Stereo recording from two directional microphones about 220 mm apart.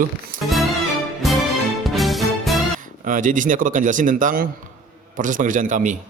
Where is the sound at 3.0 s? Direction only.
35° right (ahead or behind).